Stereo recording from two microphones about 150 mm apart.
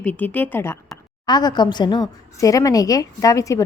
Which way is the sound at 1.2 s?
30° left (ahead or behind).